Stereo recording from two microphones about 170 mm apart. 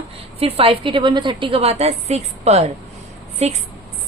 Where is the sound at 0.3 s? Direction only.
35° right (ahead or behind).